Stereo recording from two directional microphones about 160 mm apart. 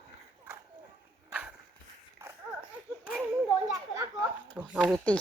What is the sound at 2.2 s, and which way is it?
Dog, 15° right (ahead or behind).